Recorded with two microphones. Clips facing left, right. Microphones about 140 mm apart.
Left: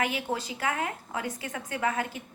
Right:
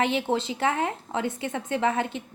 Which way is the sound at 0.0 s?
25° right (ahead or behind).